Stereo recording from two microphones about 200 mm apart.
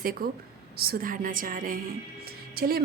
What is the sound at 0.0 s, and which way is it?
A woman's voice, 45° right (ahead or behind).